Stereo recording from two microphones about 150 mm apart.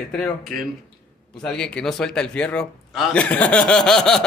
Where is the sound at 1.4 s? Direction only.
5° left (ahead or behind).